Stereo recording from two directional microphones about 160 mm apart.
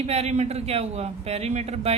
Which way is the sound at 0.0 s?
40° right (ahead or behind).